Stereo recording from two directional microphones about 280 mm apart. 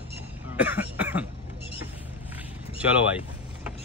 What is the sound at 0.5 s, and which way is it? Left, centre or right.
Cough, centre.